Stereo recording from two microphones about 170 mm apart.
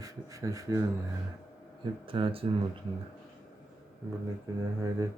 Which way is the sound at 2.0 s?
30° right (ahead or behind).